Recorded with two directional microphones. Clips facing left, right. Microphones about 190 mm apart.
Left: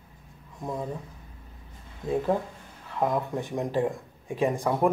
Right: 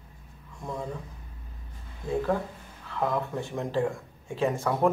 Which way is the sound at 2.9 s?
15° left (ahead or behind).